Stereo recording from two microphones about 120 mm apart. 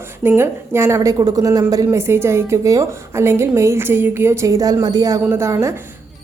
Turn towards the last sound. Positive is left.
turn(degrees=-25)  # may be behind; listen again after turning